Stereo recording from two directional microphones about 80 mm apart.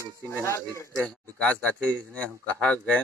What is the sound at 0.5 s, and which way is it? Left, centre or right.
Speech, left.